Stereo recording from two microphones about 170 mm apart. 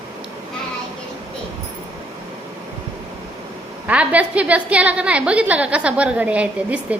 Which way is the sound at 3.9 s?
10° right (ahead or behind).